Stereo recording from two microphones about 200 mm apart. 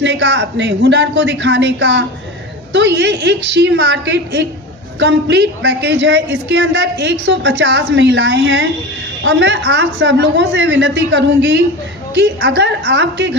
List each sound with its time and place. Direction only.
0.0 s a woman's voice: 60° right (ahead or behind)